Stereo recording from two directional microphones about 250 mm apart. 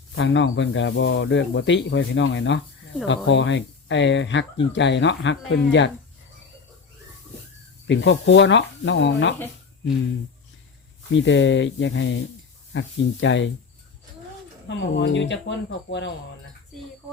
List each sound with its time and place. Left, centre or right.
0.2 s speech: left
7.9 s speech: left
11.1 s speech: left
14.7 s speech: left